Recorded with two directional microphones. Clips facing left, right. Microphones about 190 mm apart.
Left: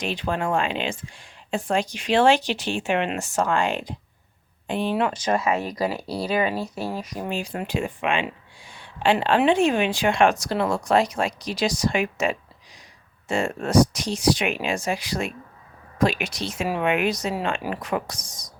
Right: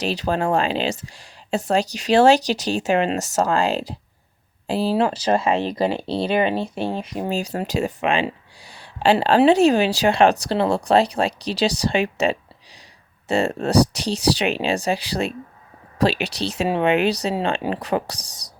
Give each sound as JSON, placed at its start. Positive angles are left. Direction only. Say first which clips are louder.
{"t": 0.0, "sound": "speech", "louder": "right 4 dB", "side_deg": -35}
{"t": 7.3, "sound": "speech", "louder": "right 3 dB", "side_deg": -40}